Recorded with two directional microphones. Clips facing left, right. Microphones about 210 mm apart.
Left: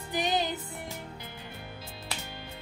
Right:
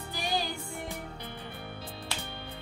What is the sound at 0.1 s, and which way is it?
Music, 20° left (ahead or behind).